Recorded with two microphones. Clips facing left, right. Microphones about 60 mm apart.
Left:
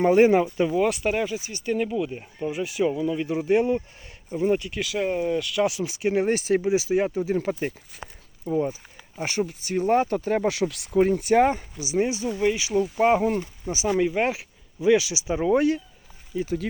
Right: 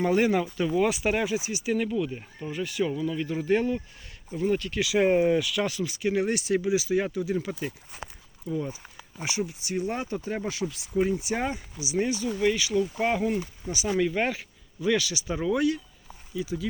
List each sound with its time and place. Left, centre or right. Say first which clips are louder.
0.0 s speech: left 6 dB; left
0.8 s speech: right 1 dB; centre
1.4 s speech: right 4 dB; centre
1.7 s speech: left 2 dB; centre
4.6 s speech: right 1 dB; centre
4.9 s speech: right 4 dB; right
5.4 s speech: left 3 dB; centre
5.8 s speech: left 3 dB; left
9.1 s speech: left 4 dB; left
10.5 s speech: left 5 dB; left
11.9 s speech: left 3 dB; left
15.4 s speech: left 4 dB; left